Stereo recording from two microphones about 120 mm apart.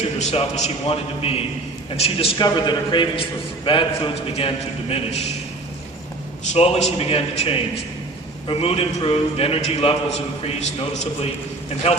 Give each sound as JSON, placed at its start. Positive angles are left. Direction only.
{"t": 0.2, "sound": "a man's voice", "side_deg": 70}
{"t": 2.4, "sound": "a man's voice", "side_deg": 40}
{"t": 6.5, "sound": "a man's voice", "side_deg": 60}